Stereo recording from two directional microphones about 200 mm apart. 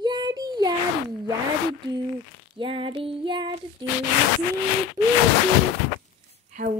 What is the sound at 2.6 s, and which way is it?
Speech, 25° right (ahead or behind).